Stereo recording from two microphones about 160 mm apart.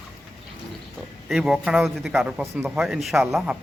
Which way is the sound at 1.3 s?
5° right (ahead or behind).